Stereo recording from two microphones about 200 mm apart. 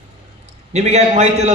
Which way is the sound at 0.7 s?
35° right (ahead or behind).